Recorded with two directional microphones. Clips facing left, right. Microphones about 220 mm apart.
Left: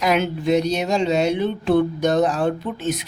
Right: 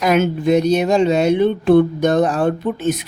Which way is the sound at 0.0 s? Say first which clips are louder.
Right 4 dB; 50° right (ahead or behind).